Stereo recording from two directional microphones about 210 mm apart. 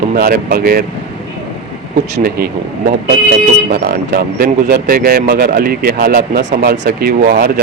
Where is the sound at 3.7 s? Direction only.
45° right (ahead or behind).